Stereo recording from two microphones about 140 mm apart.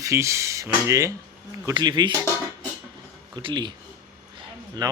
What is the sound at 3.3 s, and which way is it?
Speech, 35° right (ahead or behind).